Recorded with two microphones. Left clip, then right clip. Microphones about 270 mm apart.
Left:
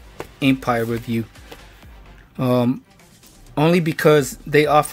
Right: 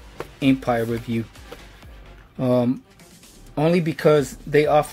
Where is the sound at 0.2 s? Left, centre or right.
Centre.